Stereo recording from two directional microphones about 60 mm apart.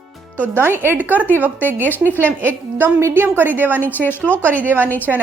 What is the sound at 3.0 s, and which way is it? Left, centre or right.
Speech, right.